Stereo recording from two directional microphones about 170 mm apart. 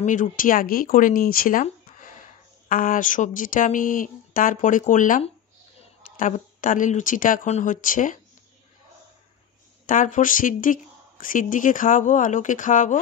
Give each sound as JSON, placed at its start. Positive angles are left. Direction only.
{"t": 0.0, "sound": "a woman's voice", "side_deg": 50}
{"t": 9.8, "sound": "a woman's voice", "side_deg": 50}